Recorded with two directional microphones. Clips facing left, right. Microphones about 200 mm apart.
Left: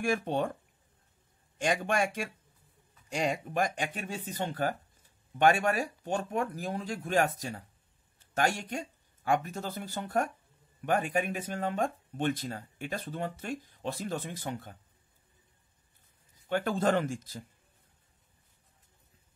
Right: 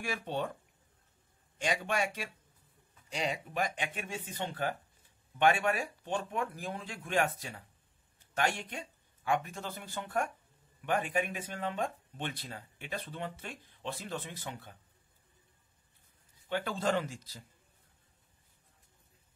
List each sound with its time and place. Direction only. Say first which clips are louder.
0.0 s speech: left 6 dB; 50° left (ahead or behind)
1.6 s speech: left 4 dB; 50° left (ahead or behind)
16.4 s speech: left 5 dB; 50° left (ahead or behind)